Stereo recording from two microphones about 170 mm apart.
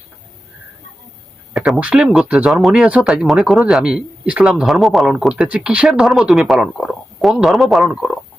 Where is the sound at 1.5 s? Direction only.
Centre (ahead or behind).